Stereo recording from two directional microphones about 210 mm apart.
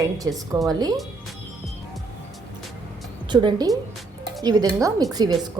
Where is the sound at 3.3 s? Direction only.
20° right (ahead or behind).